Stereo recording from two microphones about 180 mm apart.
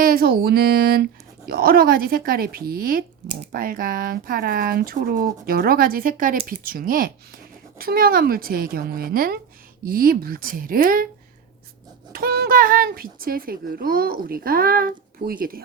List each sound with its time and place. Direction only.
0.0 s speech: 55° right (ahead or behind)
12.1 s speech: 55° right (ahead or behind)